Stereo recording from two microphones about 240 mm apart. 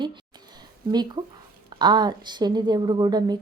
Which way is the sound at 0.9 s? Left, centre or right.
Centre.